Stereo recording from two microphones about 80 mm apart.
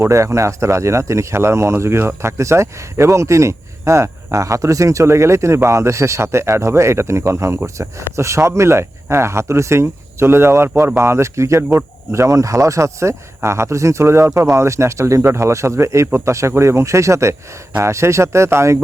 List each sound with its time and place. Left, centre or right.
0.0 s speech: right